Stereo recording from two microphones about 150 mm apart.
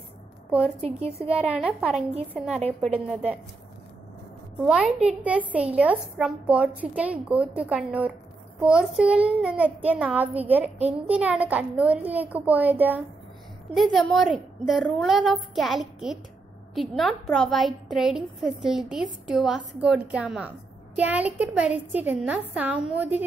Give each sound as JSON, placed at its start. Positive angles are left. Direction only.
{"t": 0.5, "sound": "a woman's voice", "side_deg": -5}
{"t": 0.7, "sound": "speech", "side_deg": -40}
{"t": 1.3, "sound": "a woman's voice", "side_deg": -5}
{"t": 4.6, "sound": "a woman's voice", "side_deg": -5}
{"t": 13.7, "sound": "a woman's voice", "side_deg": 0}